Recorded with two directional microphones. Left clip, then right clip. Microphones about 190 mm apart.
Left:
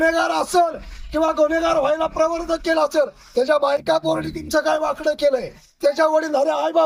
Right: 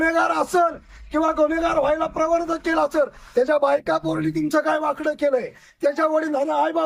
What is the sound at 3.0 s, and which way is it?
A man's voice, 15° right (ahead or behind).